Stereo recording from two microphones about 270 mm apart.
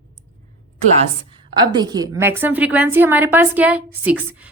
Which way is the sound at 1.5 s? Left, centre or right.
Centre.